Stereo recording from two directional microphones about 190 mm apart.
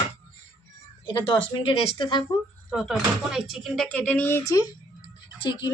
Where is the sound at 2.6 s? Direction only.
Centre (ahead or behind); by 4.7 s 15° left (ahead or behind).